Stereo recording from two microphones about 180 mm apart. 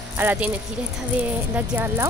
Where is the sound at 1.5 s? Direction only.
10° right (ahead or behind).